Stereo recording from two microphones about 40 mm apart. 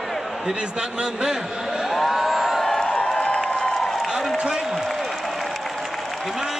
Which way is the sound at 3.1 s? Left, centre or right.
Centre.